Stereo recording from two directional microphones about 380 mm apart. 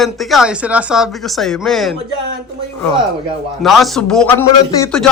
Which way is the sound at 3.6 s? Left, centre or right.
Centre.